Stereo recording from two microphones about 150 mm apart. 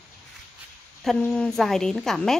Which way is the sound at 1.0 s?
Centre (ahead or behind).